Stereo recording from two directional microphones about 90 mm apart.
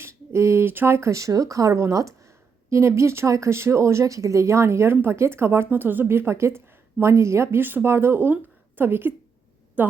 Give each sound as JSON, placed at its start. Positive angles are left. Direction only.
{"t": 0.0, "sound": "a woman's voice", "side_deg": -30}